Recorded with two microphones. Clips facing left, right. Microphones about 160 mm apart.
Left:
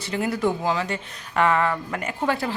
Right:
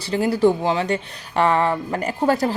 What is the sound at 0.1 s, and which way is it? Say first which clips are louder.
A woman's voice: right 6 dB; 30° right (ahead or behind).